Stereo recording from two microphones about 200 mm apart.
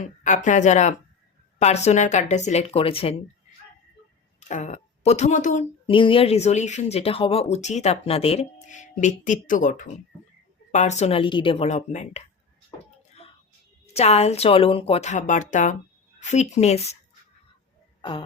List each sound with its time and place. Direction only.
0.0 s speech: 40° left (ahead or behind)
4.4 s speech: 35° left (ahead or behind)
5.9 s speech: 25° left (ahead or behind)
13.9 s speech: 30° left (ahead or behind)